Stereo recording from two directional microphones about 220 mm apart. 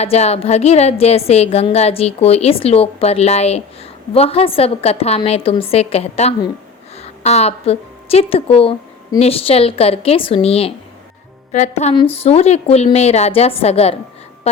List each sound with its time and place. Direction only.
0.0 s a woman's voice: 30° left (ahead or behind)